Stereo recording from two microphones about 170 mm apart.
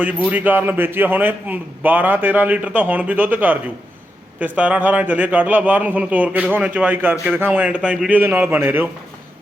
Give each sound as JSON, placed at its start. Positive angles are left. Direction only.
{"t": 0.0, "sound": "a man's voice", "side_deg": -10}